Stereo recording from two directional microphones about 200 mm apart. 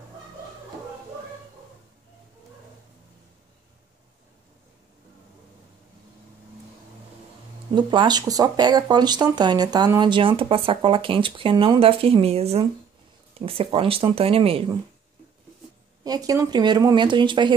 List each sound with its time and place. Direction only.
7.7 s speech: 25° right (ahead or behind)
16.0 s speech: 20° right (ahead or behind)